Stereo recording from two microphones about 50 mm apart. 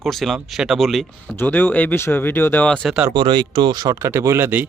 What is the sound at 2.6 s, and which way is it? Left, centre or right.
Speech, left.